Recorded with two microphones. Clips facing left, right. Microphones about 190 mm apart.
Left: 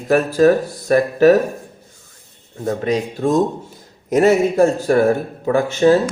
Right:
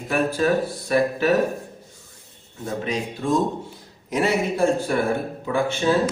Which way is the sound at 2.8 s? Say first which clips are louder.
Left 6 dB; 45° left (ahead or behind).